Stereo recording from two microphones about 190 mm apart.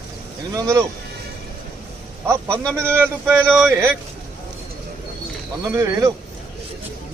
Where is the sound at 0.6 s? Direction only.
15° right (ahead or behind).